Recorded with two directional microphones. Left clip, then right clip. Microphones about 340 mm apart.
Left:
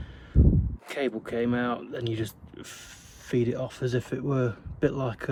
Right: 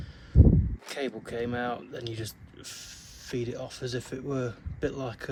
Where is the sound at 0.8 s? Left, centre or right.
Centre.